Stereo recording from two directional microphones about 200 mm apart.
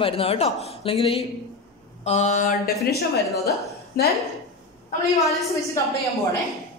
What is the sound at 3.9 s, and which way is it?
Speech, 50° left (ahead or behind).